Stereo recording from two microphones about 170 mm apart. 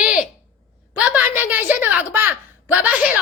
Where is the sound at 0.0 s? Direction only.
5° right (ahead or behind).